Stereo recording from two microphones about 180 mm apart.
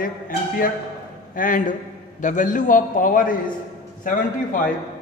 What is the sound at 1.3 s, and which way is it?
A man's voice, 50° left (ahead or behind).